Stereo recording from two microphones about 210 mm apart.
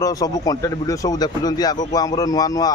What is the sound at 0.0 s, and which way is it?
Speech, 15° left (ahead or behind).